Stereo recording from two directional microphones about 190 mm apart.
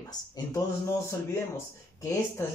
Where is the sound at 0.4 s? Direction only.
20° left (ahead or behind).